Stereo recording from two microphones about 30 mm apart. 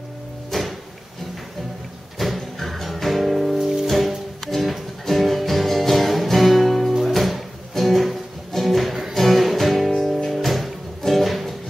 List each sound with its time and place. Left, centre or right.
0.5 s music: centre
2.1 s music: centre